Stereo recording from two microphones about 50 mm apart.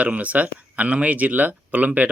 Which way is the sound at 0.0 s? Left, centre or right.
Right.